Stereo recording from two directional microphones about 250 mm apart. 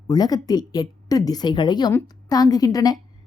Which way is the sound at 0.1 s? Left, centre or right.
Centre.